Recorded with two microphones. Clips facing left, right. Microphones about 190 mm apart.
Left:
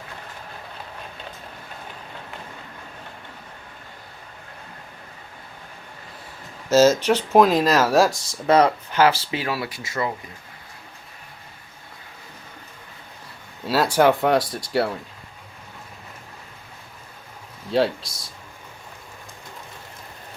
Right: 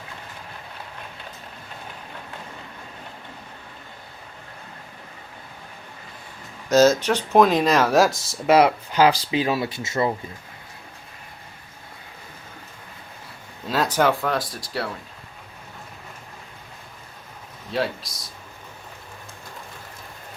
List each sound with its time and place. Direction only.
6.7 s speech: 10° left (ahead or behind); by 10.1 s 25° right (ahead or behind)
13.7 s speech: 10° left (ahead or behind)
14.2 s speech: 25° left (ahead or behind)
17.7 s speech: 30° left (ahead or behind)